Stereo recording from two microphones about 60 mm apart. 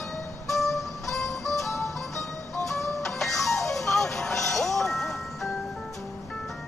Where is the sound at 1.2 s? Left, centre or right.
Left.